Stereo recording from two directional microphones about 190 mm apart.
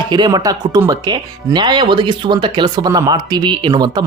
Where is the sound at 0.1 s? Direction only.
25° right (ahead or behind).